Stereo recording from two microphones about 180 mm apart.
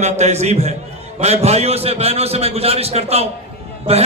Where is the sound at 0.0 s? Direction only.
40° right (ahead or behind).